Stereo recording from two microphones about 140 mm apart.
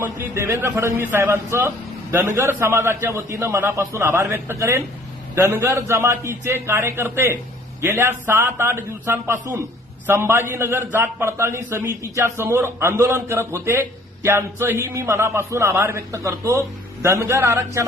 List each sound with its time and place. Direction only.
0.0 s a man's voice: 15° right (ahead or behind)